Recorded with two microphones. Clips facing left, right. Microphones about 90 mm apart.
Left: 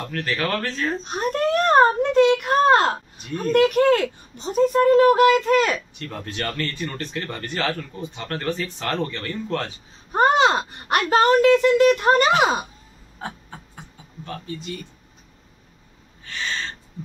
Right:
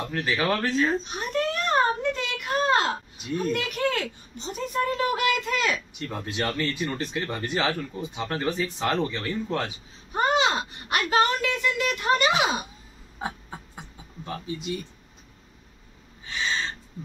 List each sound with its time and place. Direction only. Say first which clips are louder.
0.1 s speech: even; 15° right (ahead or behind)
1.0 s speech: left 5 dB; 45° left (ahead or behind)
5.9 s speech: even; 15° right (ahead or behind)
10.1 s speech: left 6 dB; 45° left (ahead or behind)
14.2 s speech: even; 15° right (ahead or behind)